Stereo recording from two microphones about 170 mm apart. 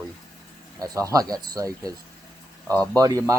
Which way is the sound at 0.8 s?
20° right (ahead or behind).